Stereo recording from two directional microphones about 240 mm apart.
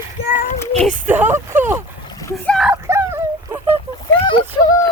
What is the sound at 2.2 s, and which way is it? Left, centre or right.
Splash, centre.